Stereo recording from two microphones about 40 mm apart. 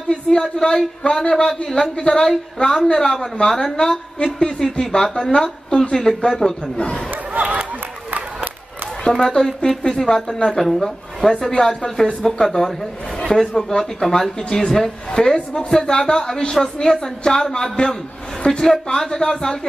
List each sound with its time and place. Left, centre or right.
0.1 s a woman's voice: centre
5.7 s speech: left
5.9 s a woman's voice: centre
9.2 s a woman's voice: centre
11.5 s speech: centre
12.2 s a woman's voice: centre